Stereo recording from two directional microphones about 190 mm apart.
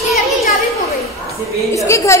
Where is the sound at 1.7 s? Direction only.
15° left (ahead or behind).